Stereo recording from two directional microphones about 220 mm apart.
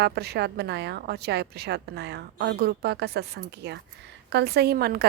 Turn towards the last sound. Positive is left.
turn(degrees=-45)  # may be behind; listen again after turning